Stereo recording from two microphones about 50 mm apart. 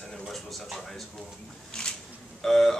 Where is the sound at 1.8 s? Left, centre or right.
Centre.